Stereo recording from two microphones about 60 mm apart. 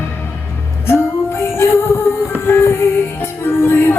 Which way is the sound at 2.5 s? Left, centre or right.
Left.